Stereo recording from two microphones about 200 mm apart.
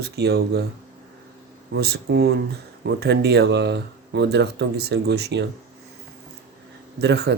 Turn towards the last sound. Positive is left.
turn(degrees=-60)  # may be behind; listen again after turning